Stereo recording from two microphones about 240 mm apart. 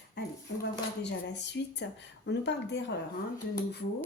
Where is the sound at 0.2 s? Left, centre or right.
Left.